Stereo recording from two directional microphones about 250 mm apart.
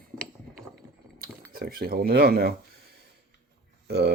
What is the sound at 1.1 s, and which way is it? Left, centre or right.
Speech, right.